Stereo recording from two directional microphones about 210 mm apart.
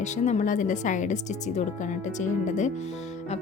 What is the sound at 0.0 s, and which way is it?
A woman's voice, 35° left (ahead or behind).